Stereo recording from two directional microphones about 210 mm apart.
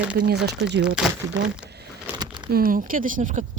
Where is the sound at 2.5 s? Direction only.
40° right (ahead or behind).